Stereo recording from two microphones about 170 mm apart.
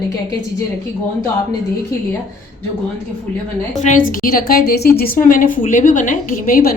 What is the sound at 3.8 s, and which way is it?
A woman's voice, 50° left (ahead or behind).